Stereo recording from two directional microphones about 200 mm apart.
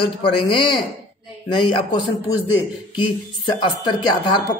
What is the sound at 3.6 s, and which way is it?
Speech, 25° left (ahead or behind).